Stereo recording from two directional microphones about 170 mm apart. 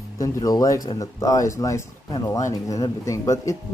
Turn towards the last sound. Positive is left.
turn(degrees=20)  # may be behind; listen again after turning